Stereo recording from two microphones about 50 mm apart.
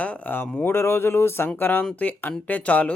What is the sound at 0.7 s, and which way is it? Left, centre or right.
Speech, left.